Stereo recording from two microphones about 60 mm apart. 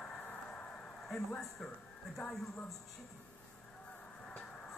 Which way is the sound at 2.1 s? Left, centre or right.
Centre.